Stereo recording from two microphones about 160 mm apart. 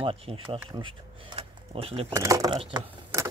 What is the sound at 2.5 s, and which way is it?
Speech, 30° right (ahead or behind).